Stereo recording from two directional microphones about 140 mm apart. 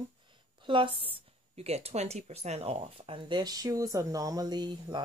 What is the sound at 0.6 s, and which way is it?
A woman's voice, 35° right (ahead or behind).